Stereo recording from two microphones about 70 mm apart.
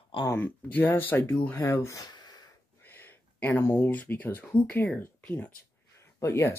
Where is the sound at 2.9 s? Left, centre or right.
Left.